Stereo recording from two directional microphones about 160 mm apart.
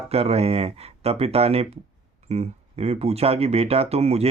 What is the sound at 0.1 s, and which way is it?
Speech, 40° right (ahead or behind).